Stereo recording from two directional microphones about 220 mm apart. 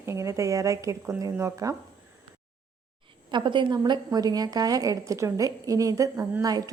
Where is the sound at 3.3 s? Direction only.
20° right (ahead or behind).